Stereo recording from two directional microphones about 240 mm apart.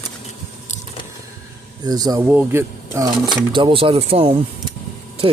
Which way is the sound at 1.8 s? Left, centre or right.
Centre.